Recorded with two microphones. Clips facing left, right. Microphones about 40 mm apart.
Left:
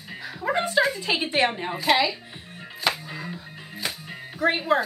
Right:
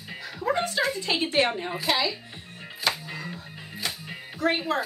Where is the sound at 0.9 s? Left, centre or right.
Centre.